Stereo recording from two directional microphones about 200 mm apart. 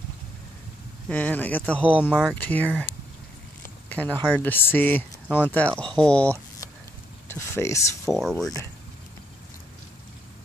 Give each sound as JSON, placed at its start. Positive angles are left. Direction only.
{"t": 1.0, "sound": "speech", "side_deg": 10}
{"t": 1.9, "sound": "speech", "side_deg": -5}
{"t": 2.3, "sound": "speech", "side_deg": 10}
{"t": 3.9, "sound": "speech", "side_deg": 10}
{"t": 8.1, "sound": "speech", "side_deg": 0}